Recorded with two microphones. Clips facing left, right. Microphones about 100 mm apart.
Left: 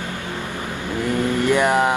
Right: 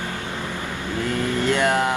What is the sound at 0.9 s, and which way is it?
Mantra, 20° left (ahead or behind).